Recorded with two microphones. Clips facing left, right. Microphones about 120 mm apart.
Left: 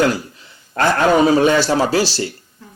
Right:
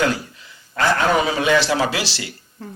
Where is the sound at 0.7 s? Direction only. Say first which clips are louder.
Left 4 dB; 45° left (ahead or behind).